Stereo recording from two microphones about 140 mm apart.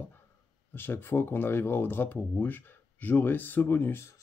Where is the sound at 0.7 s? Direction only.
15° left (ahead or behind).